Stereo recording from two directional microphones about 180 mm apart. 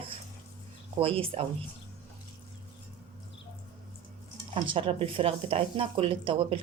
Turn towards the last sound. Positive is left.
turn(degrees=-30)  # may be behind; listen again after turning